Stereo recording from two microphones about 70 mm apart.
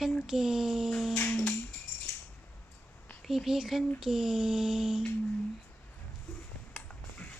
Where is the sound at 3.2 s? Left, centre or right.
Centre.